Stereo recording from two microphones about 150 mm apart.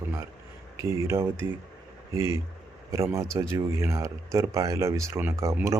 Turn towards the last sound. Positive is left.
turn(degrees=-20)  # may be behind; listen again after turning